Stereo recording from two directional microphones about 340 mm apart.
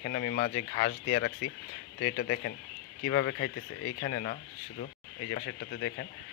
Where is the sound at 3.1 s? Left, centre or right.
Left.